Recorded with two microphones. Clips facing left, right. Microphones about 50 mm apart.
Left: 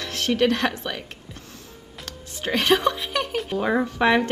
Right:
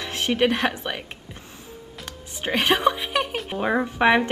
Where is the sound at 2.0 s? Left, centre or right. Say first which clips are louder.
Even; centre.